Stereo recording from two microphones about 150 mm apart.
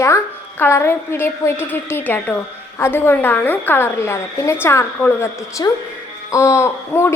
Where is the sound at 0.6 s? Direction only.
15° left (ahead or behind).